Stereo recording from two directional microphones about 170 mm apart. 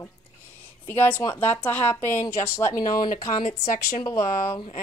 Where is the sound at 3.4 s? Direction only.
40° left (ahead or behind).